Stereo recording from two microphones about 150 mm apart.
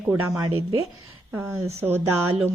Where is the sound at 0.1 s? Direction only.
20° right (ahead or behind).